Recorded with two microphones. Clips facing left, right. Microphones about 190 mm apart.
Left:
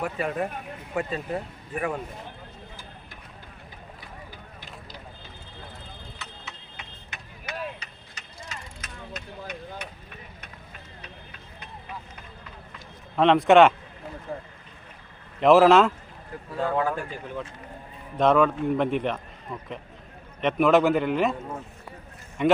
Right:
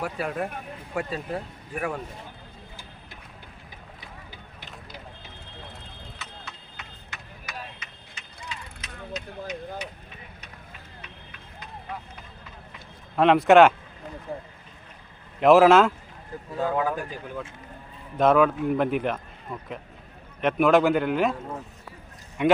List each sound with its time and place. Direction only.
0.0 s a man's voice: centre (ahead or behind)
8.5 s mechanisms: 45° left (ahead or behind)
9.1 s vehicle: 55° left (ahead or behind)
13.1 s a man's voice: centre (ahead or behind)
14.3 s a sound: centre (ahead or behind)
15.4 s a man's voice: centre (ahead or behind)
18.2 s a man's voice: 5° right (ahead or behind)